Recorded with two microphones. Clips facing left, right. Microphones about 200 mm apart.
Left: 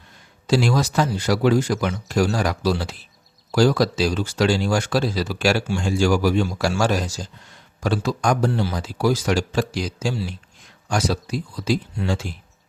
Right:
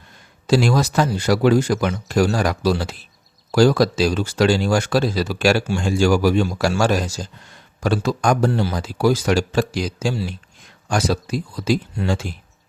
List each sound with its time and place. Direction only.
0.4 s speech: 50° right (ahead or behind); by 4.6 s 65° right (ahead or behind)
4.6 s a man's voice: 50° right (ahead or behind); by 7.3 s 70° right (ahead or behind)
7.8 s speech: 50° right (ahead or behind)
9.0 s a man's voice: 70° right (ahead or behind)
10.8 s speech: 50° right (ahead or behind)
11.3 s speech: 65° right (ahead or behind)